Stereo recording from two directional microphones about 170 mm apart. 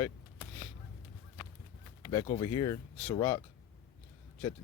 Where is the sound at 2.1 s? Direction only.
25° left (ahead or behind).